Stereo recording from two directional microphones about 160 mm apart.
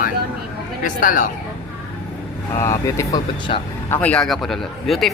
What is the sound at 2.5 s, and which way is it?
Speech, 20° left (ahead or behind).